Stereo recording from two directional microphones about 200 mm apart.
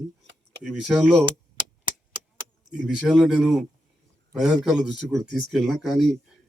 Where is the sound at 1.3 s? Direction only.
25° right (ahead or behind).